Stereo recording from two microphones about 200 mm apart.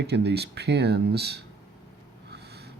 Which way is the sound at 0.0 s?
55° right (ahead or behind).